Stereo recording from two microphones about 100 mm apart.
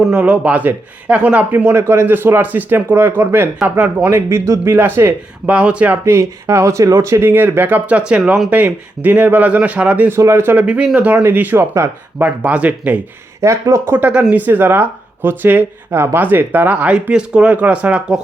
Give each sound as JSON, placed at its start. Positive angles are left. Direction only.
{"t": 0.0, "sound": "a man's voice", "side_deg": -10}
{"t": 6.1, "sound": "a man's voice", "side_deg": -30}
{"t": 10.1, "sound": "a man's voice", "side_deg": -30}
{"t": 12.2, "sound": "speech", "side_deg": -15}
{"t": 13.4, "sound": "a man's voice", "side_deg": -30}
{"t": 14.1, "sound": "speech", "side_deg": -10}